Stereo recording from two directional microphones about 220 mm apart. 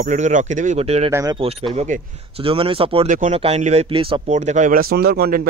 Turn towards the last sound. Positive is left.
turn(degrees=-45)  # may be behind; listen again after turning